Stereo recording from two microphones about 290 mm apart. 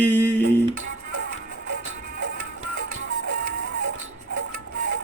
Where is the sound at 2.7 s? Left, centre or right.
Right.